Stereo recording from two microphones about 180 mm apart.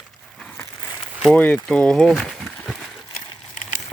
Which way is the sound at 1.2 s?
5° left (ahead or behind).